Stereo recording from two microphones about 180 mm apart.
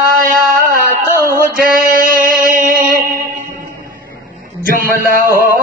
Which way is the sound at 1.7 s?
50° right (ahead or behind).